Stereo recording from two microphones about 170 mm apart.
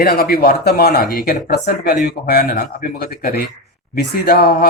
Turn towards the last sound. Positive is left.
turn(degrees=60)  # may be behind; listen again after turning